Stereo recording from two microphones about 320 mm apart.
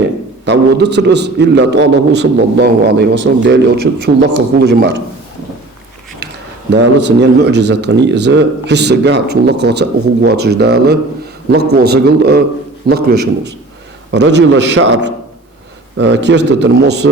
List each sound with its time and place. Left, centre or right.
0.4 s a man's voice: right
6.7 s a man's voice: right